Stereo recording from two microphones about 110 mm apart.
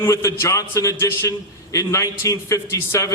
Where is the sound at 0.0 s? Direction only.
25° left (ahead or behind).